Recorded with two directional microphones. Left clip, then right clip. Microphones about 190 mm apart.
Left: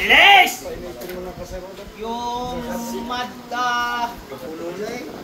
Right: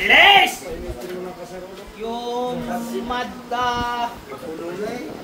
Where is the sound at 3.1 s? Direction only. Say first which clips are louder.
Right 2 dB; 30° right (ahead or behind).